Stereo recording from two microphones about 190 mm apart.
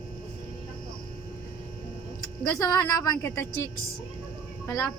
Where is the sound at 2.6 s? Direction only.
20° left (ahead or behind).